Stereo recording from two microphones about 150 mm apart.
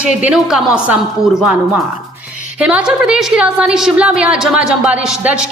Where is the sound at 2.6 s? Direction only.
5° right (ahead or behind).